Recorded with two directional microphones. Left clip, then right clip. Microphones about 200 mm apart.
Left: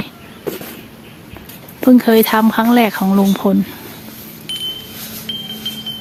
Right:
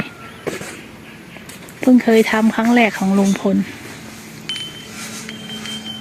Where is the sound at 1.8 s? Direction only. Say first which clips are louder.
Left 2 dB; 15° left (ahead or behind).